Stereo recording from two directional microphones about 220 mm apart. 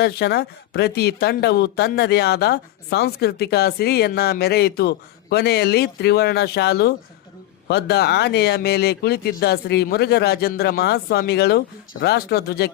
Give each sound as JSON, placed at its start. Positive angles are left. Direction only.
{"t": 0.0, "sound": "speech", "side_deg": 45}